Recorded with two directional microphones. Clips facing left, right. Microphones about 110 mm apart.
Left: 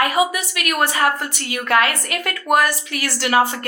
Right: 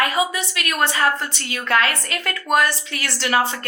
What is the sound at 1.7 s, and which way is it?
Speech, 20° left (ahead or behind).